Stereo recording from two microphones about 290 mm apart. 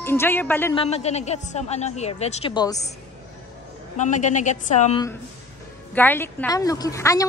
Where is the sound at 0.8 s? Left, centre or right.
Left.